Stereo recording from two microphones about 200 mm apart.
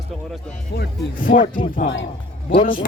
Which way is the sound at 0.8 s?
45° left (ahead or behind).